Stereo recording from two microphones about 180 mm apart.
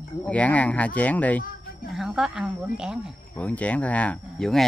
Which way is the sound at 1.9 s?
5° right (ahead or behind).